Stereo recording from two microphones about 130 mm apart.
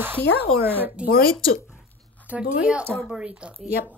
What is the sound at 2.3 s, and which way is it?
Speech, 10° right (ahead or behind).